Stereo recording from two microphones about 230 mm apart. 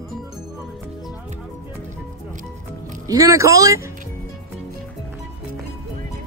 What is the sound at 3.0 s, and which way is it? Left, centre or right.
Speech, centre.